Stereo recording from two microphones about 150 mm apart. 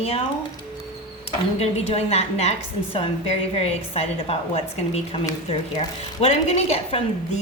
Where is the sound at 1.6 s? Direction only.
45° left (ahead or behind).